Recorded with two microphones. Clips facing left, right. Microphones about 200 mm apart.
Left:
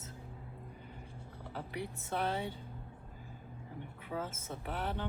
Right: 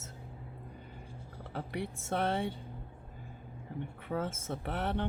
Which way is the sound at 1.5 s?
65° right (ahead or behind).